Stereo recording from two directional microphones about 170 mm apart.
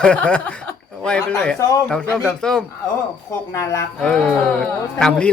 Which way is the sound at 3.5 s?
15° left (ahead or behind).